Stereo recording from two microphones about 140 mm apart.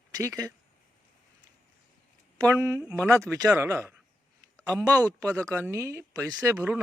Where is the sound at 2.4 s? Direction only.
20° right (ahead or behind).